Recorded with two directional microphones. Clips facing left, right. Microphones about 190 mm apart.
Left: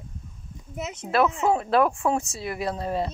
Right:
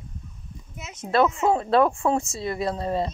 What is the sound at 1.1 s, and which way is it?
Speech, centre (ahead or behind).